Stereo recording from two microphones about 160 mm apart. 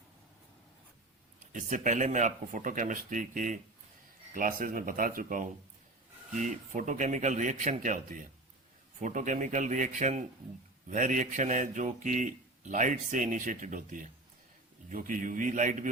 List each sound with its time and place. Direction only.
1.5 s speech: 50° right (ahead or behind)